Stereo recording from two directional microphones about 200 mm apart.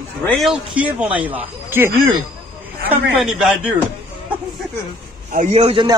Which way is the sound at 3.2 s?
Centre (ahead or behind).